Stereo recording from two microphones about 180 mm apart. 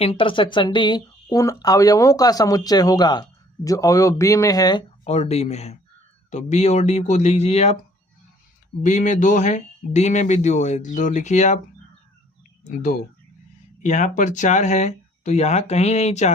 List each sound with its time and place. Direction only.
0.0 s speech: 30° left (ahead or behind)
5.0 s speech: 35° left (ahead or behind)
8.8 s speech: 45° left (ahead or behind)
12.6 s speech: 45° left (ahead or behind)